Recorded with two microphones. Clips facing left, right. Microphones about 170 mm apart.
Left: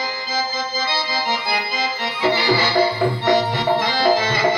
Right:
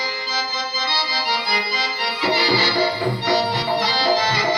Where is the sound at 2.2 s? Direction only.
50° left (ahead or behind).